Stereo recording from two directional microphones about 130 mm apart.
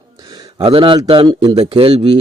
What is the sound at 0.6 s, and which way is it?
Speech, 45° right (ahead or behind).